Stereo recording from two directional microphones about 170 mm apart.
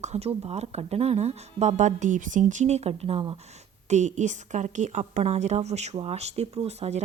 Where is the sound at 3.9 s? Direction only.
45° right (ahead or behind).